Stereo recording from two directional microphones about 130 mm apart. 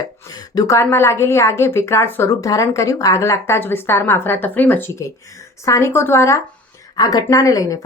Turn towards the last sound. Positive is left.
turn(degrees=25)  # may be behind; listen again after turning